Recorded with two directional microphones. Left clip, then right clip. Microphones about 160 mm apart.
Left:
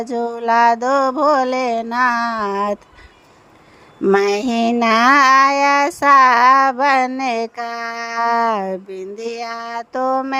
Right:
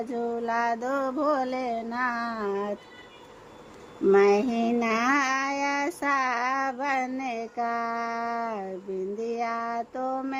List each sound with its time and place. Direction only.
0.0 s child singing: 30° left (ahead or behind)
4.0 s child singing: 30° left (ahead or behind)